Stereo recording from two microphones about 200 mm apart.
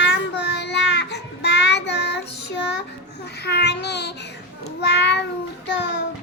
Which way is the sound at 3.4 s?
55° left (ahead or behind).